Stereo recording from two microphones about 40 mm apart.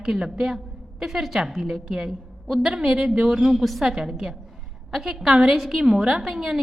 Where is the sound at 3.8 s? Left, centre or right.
Centre.